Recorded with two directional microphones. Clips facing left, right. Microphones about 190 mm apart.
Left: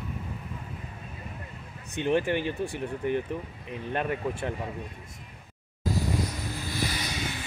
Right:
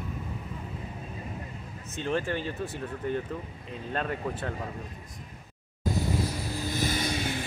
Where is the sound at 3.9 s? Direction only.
15° left (ahead or behind).